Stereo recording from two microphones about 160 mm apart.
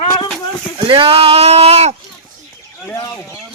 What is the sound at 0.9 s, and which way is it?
Speech, 35° right (ahead or behind).